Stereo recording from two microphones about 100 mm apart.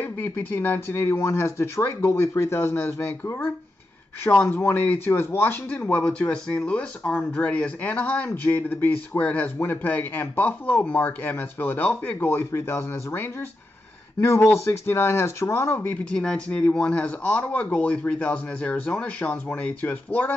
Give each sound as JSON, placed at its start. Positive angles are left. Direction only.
{"t": 0.0, "sound": "speech", "side_deg": 20}
{"t": 16.1, "sound": "speech", "side_deg": 10}